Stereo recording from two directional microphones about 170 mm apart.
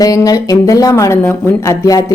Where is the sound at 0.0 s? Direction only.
20° left (ahead or behind).